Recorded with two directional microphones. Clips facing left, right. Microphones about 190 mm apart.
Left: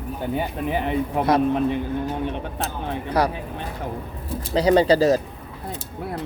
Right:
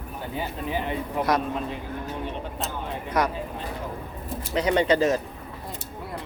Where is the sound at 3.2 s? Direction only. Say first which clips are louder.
Left 3 dB; 30° left (ahead or behind).